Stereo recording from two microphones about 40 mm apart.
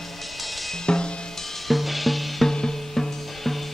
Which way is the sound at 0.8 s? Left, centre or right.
Left.